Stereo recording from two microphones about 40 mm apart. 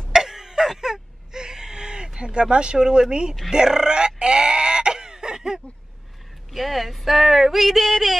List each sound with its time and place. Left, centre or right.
0.1 s whimper: centre
3.4 s fowl: centre
6.5 s speech: centre